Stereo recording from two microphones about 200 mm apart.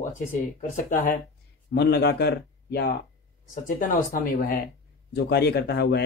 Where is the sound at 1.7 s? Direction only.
55° left (ahead or behind).